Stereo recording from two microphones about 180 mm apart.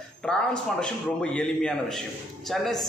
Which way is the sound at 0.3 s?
5° left (ahead or behind).